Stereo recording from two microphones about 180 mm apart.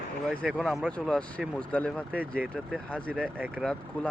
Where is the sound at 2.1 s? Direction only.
10° right (ahead or behind).